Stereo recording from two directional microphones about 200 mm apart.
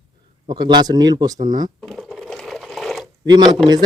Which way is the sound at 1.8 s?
Centre (ahead or behind).